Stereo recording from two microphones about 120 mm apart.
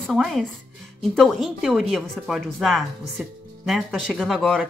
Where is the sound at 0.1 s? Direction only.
Centre (ahead or behind).